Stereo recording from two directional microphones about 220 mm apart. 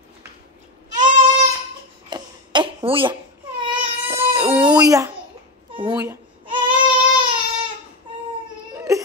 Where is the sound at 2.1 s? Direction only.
20° right (ahead or behind).